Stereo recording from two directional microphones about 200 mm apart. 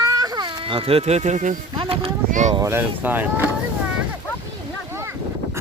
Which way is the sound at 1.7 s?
25° right (ahead or behind).